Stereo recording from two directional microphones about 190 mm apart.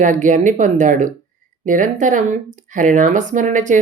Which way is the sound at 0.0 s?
40° right (ahead or behind).